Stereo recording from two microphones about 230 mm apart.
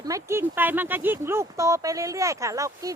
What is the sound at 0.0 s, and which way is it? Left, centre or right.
Speech, centre.